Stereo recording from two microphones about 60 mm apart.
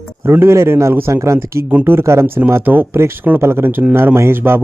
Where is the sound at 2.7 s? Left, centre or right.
Right.